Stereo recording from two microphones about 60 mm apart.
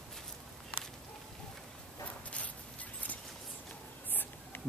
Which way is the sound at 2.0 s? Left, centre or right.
Left.